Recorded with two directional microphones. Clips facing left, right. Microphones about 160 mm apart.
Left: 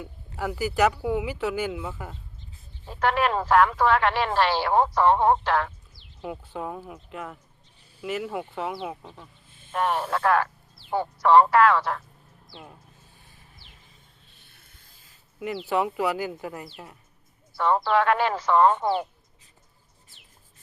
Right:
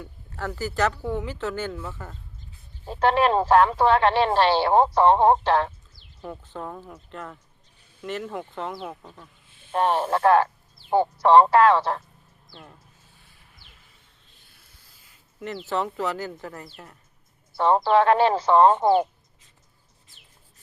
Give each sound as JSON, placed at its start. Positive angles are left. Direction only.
{"t": 0.0, "sound": "speech", "side_deg": 10}
{"t": 2.8, "sound": "speech", "side_deg": -30}
{"t": 6.2, "sound": "speech", "side_deg": 10}
{"t": 9.5, "sound": "a sound", "side_deg": 45}
{"t": 9.7, "sound": "speech", "side_deg": -30}
{"t": 15.4, "sound": "speech", "side_deg": 10}
{"t": 17.5, "sound": "speech", "side_deg": -30}